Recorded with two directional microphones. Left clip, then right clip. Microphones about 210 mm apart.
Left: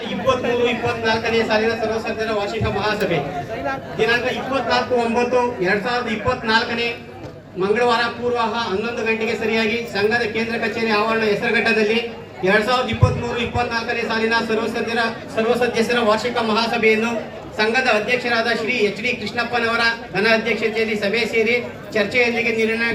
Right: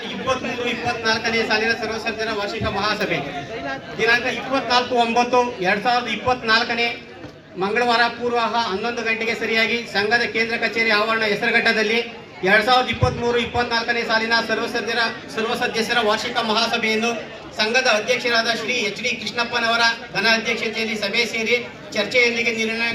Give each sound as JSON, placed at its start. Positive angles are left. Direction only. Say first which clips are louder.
{"t": 0.3, "sound": "a man's voice", "louder": "left 5 dB", "side_deg": -30}